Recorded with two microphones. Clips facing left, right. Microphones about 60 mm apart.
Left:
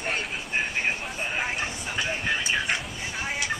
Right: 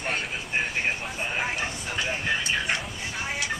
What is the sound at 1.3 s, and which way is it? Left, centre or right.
Speech, centre.